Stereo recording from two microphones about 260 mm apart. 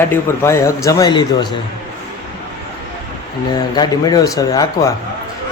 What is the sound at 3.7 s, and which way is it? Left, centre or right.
A man's voice, centre.